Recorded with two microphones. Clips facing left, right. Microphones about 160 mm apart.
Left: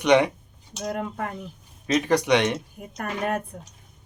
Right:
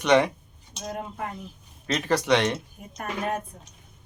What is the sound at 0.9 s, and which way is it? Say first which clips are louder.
Speech: left 3 dB; 65° left (ahead or behind).